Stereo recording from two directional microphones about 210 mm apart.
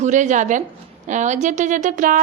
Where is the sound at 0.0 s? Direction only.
35° right (ahead or behind).